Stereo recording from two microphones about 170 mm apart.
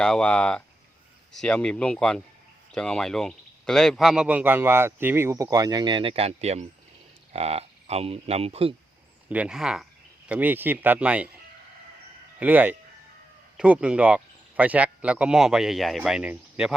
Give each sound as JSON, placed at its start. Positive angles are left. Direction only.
{"t": 0.0, "sound": "speech", "side_deg": 5}
{"t": 9.3, "sound": "speech", "side_deg": -5}
{"t": 12.4, "sound": "speech", "side_deg": -10}